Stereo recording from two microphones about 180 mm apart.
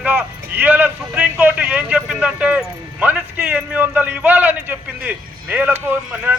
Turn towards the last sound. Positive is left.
turn(degrees=-10)  # may be behind; listen again after turning